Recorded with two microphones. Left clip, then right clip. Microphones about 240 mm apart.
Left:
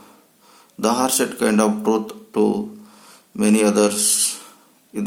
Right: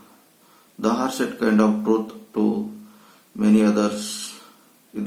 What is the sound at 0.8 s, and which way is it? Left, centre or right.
Speech, left.